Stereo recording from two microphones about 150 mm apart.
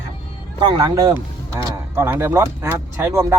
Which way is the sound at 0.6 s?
25° right (ahead or behind).